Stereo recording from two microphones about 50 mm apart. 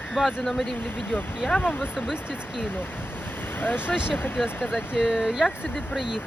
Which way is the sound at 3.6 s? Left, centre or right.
Left.